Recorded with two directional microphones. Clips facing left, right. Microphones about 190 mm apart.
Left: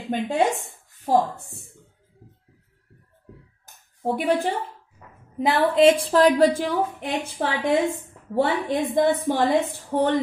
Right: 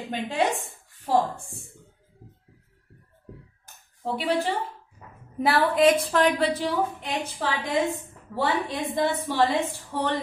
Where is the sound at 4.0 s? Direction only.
50° left (ahead or behind).